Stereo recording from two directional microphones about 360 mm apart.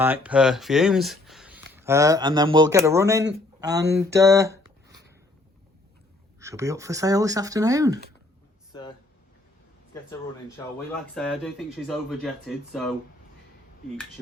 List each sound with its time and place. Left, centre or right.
0.0 s speech: centre
6.4 s speech: centre
10.9 s speech: centre